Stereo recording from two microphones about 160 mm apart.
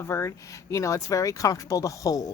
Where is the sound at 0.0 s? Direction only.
20° left (ahead or behind).